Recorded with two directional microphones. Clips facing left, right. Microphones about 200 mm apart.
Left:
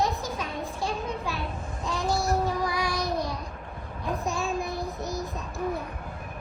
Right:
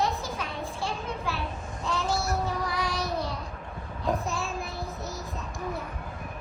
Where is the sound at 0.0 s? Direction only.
15° left (ahead or behind).